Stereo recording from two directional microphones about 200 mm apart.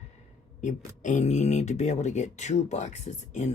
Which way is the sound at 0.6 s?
35° left (ahead or behind).